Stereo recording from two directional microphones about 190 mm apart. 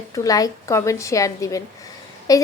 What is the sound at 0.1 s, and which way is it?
A woman's voice, 20° left (ahead or behind).